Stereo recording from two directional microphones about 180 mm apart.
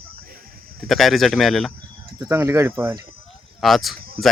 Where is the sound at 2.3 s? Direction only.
15° right (ahead or behind).